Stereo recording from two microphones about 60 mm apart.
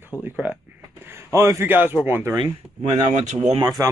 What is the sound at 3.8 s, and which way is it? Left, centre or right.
Speech, right.